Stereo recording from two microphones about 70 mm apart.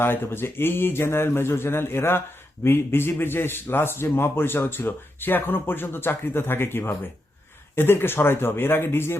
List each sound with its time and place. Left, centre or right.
0.0 s a man's voice: left